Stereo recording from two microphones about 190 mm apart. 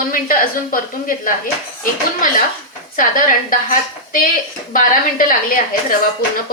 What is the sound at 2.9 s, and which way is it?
A woman's voice, 45° left (ahead or behind).